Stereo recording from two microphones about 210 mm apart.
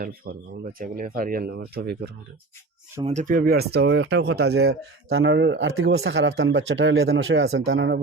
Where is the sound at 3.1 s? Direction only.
35° right (ahead or behind); by 8.0 s 60° right (ahead or behind).